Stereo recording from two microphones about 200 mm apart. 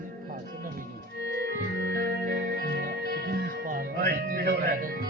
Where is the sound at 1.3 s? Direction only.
55° right (ahead or behind).